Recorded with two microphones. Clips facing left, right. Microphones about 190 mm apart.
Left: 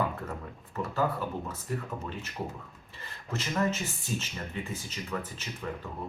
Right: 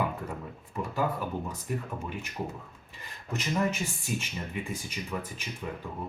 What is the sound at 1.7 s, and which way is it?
Speech, 15° right (ahead or behind).